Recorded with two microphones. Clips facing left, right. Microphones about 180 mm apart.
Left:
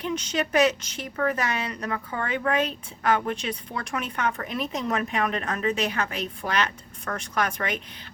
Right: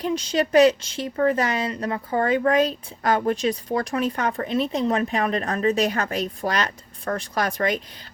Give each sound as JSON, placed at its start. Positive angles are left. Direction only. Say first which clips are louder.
{"t": 0.0, "sound": "speech", "louder": "right 5 dB", "side_deg": -35}